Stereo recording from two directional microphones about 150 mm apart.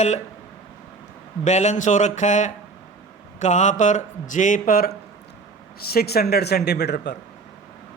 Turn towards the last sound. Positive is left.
turn(degrees=90)